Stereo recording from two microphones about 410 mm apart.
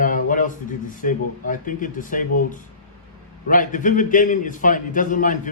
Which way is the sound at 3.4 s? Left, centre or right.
Centre.